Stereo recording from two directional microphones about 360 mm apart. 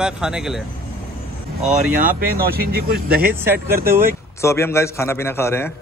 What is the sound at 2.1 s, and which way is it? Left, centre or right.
Speech, right.